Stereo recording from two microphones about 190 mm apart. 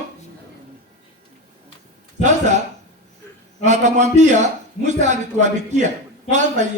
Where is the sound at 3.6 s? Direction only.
40° right (ahead or behind).